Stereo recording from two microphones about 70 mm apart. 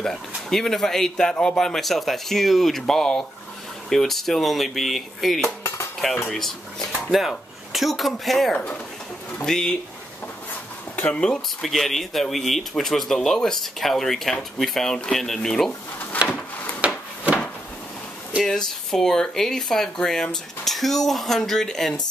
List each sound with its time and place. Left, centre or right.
0.0 s speech: centre
11.0 s speech: centre
16.8 s wood: centre
18.4 s speech: centre